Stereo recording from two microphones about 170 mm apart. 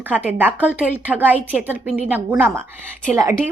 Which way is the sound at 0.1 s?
10° right (ahead or behind).